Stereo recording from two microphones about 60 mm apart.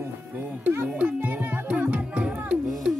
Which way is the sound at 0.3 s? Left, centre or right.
Right.